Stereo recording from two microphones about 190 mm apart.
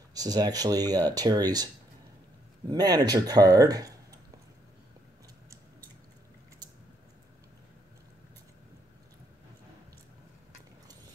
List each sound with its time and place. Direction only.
0.1 s speech: 20° right (ahead or behind)
2.7 s speech: 20° right (ahead or behind)